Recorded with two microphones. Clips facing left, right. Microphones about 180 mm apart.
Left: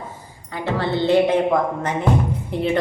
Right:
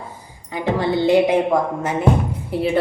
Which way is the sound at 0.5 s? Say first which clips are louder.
Right 3 dB; 15° right (ahead or behind).